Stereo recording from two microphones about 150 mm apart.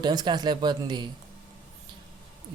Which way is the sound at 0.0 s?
30° right (ahead or behind).